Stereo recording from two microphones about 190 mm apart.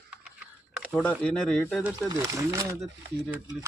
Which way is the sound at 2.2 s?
15° right (ahead or behind).